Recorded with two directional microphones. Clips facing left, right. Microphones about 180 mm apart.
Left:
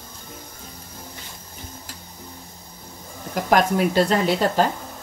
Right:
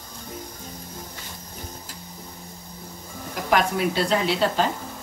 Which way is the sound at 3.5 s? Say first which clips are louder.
Left 4 dB; 45° left (ahead or behind).